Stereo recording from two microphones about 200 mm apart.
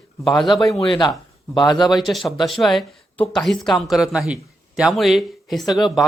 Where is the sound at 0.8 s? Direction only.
20° left (ahead or behind).